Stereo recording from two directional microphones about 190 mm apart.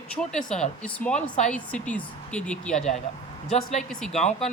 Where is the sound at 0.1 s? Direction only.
5° left (ahead or behind).